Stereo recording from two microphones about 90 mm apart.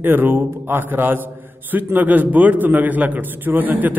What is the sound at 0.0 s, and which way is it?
A man's voice, 20° right (ahead or behind).